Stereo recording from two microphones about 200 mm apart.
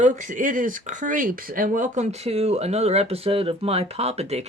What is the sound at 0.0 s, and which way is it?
Speech, 40° right (ahead or behind).